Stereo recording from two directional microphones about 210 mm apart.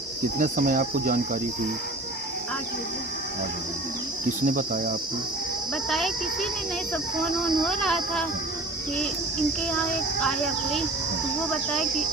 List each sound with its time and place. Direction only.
0.3 s speech: 40° right (ahead or behind)
4.4 s speech: 40° right (ahead or behind)
5.9 s speech: centre (ahead or behind)
10.2 s speech: centre (ahead or behind)